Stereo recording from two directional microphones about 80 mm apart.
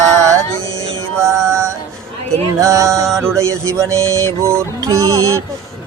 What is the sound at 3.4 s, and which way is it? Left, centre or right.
A man's voice, right.